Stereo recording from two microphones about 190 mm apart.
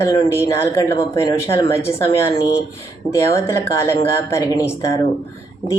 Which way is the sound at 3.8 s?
15° left (ahead or behind).